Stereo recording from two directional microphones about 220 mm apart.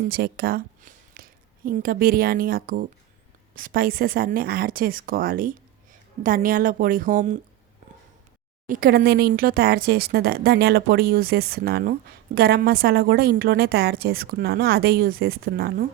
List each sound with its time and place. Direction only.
0.1 s a woman's voice: 45° right (ahead or behind)
8.6 s speech: 40° right (ahead or behind)